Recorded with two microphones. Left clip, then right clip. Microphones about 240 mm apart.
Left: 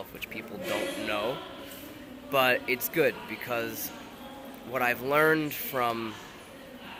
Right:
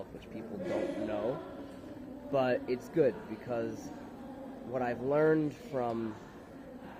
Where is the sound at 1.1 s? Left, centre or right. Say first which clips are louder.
Left 4 dB; centre.